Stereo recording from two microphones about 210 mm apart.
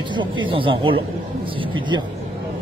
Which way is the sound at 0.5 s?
25° right (ahead or behind).